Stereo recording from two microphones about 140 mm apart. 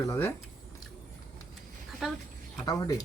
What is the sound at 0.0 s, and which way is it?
Speech, 20° left (ahead or behind).